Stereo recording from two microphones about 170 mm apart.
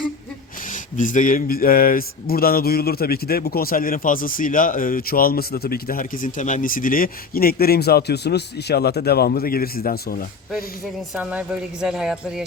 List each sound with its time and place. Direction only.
0.7 s speech: 50° left (ahead or behind)
11.1 s speech: 5° right (ahead or behind)